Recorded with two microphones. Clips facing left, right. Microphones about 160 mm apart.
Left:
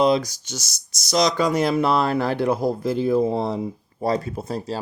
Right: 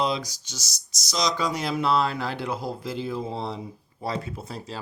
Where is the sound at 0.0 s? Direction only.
50° left (ahead or behind).